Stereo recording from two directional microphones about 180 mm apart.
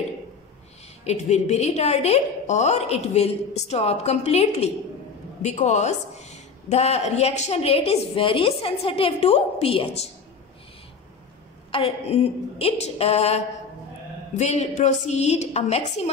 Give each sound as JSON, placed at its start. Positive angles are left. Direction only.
{"t": 1.0, "sound": "a woman's voice", "side_deg": 40}
{"t": 11.7, "sound": "a woman's voice", "side_deg": 35}